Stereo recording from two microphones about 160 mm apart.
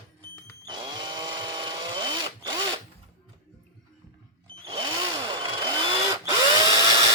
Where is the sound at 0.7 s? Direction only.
30° right (ahead or behind).